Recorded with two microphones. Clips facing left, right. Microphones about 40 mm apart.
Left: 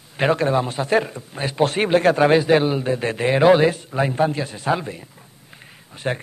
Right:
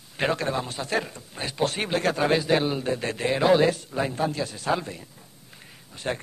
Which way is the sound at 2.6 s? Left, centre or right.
Centre.